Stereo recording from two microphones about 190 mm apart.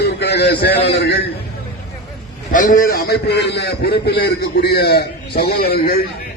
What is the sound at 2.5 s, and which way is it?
A man's voice, 45° left (ahead or behind).